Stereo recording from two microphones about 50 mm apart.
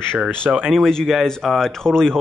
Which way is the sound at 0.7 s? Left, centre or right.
Centre.